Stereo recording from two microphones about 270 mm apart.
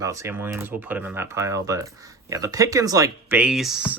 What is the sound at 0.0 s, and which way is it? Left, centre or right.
Speech, centre.